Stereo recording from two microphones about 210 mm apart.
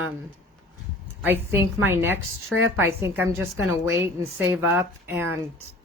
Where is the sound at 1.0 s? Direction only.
10° right (ahead or behind).